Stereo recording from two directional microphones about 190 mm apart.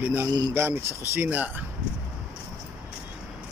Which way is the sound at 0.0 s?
10° right (ahead or behind).